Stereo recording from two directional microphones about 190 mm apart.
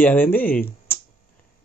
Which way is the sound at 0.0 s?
10° left (ahead or behind).